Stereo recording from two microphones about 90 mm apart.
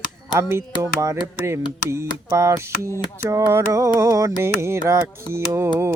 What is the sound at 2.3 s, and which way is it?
Music, 30° right (ahead or behind).